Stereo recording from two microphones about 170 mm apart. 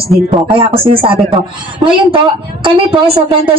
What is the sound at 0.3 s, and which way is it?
Speech, 35° right (ahead or behind).